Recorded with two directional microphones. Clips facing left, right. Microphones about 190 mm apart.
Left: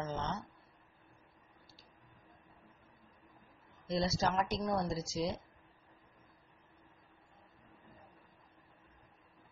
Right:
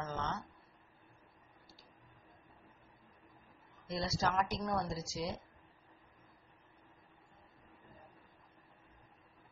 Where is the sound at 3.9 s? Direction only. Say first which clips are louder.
Left 3 dB; 25° left (ahead or behind).